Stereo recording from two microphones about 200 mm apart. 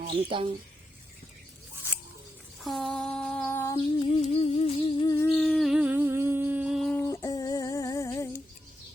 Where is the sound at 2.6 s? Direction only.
Centre (ahead or behind).